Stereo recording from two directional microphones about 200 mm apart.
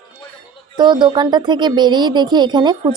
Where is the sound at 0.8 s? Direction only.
20° right (ahead or behind).